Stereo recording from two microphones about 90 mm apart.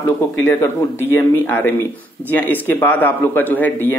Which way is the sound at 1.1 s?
25° left (ahead or behind).